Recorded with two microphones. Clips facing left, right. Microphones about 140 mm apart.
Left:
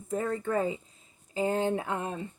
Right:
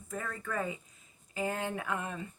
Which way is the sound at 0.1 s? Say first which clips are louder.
Left 9 dB; 25° left (ahead or behind).